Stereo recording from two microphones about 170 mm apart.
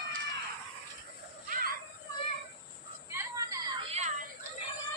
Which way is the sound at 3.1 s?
15° right (ahead or behind).